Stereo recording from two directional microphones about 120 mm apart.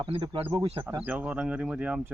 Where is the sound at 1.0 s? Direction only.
10° right (ahead or behind).